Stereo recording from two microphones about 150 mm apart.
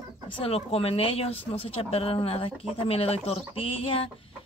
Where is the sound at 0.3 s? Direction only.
40° left (ahead or behind).